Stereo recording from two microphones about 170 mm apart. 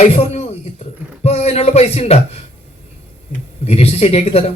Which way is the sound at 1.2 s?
40° left (ahead or behind).